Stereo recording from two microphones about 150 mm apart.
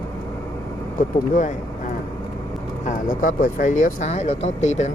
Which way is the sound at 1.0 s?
60° left (ahead or behind).